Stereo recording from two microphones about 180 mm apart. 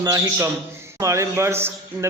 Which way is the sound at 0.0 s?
20° right (ahead or behind).